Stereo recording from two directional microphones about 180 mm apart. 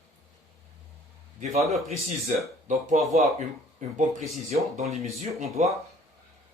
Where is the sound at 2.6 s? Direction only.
40° right (ahead or behind).